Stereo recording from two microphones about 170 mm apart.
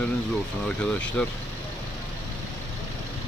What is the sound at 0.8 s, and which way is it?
Speech, 5° left (ahead or behind).